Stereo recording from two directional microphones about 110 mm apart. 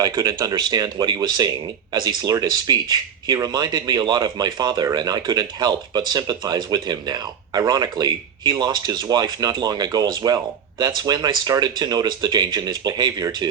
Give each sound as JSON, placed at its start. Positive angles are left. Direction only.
{"t": 0.0, "sound": "speech", "side_deg": -30}